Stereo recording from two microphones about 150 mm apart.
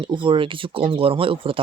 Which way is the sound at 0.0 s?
35° right (ahead or behind).